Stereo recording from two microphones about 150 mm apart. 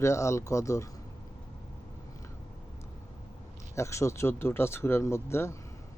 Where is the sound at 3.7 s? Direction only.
20° left (ahead or behind).